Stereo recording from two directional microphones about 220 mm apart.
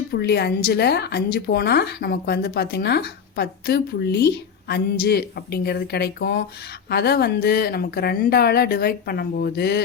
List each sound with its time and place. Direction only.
0.1 s a woman's voice: 45° left (ahead or behind)